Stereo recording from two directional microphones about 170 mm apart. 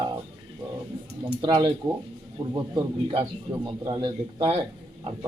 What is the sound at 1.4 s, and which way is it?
Speech, 25° right (ahead or behind).